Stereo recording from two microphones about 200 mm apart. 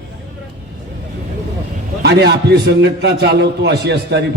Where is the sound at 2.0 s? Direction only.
60° right (ahead or behind).